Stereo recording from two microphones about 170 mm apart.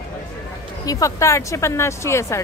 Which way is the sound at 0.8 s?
20° left (ahead or behind).